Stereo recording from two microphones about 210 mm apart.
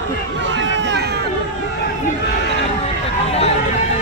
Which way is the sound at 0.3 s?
60° right (ahead or behind).